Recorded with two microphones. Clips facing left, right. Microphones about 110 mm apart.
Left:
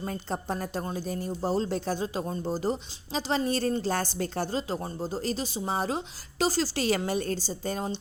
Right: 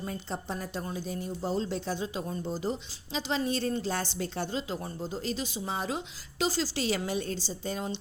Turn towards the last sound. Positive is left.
turn(degrees=50)  # may be behind; listen again after turning